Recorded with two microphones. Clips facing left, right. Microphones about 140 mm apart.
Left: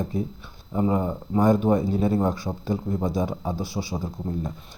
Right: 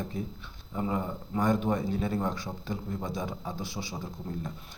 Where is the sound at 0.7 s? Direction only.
30° left (ahead or behind).